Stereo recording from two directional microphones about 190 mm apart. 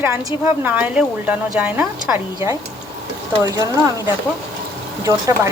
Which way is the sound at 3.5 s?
15° right (ahead or behind).